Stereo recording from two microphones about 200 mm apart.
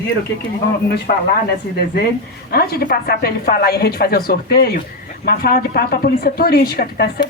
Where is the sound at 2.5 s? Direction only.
50° left (ahead or behind).